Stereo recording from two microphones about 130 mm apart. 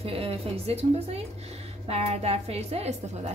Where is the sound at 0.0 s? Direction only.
50° right (ahead or behind).